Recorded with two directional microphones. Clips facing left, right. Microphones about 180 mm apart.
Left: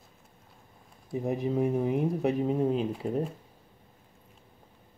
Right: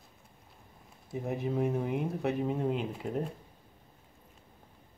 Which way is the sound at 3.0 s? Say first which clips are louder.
Left 2 dB; 5° left (ahead or behind).